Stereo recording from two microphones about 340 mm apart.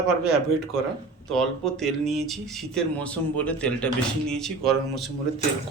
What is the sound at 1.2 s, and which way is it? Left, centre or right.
Speech, centre.